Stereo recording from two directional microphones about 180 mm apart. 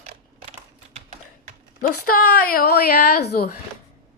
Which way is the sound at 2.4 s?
55° left (ahead or behind).